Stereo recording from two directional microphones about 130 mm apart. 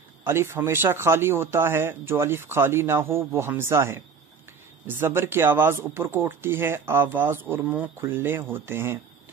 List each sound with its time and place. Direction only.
0.2 s speech: 20° right (ahead or behind)